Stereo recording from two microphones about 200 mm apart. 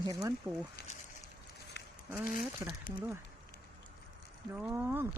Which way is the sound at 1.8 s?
55° left (ahead or behind).